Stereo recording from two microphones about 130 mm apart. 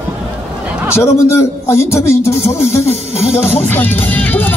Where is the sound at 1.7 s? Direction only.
20° left (ahead or behind).